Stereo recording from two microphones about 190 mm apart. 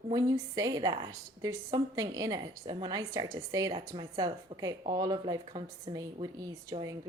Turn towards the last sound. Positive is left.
turn(degrees=-20)  # may be behind; listen again after turning